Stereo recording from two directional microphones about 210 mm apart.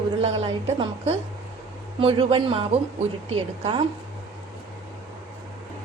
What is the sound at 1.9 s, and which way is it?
Speech, 25° right (ahead or behind).